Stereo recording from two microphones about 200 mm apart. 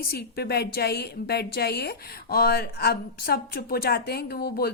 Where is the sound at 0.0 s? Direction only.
50° left (ahead or behind).